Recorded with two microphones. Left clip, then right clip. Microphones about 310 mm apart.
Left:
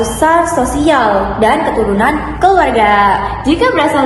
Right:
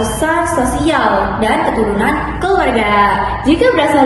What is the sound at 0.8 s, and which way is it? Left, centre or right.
A woman's voice, centre.